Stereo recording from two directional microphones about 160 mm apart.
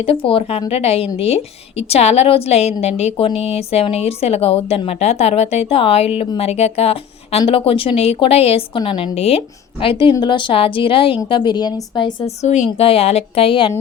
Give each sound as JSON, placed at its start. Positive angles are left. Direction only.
{"t": 0.0, "sound": "a woman's voice", "side_deg": 35}
{"t": 12.4, "sound": "a woman's voice", "side_deg": 45}